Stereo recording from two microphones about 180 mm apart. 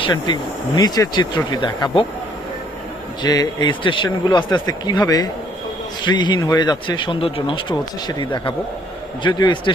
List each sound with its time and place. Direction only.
0.0 s speech: 25° left (ahead or behind)
3.2 s speech: 20° left (ahead or behind)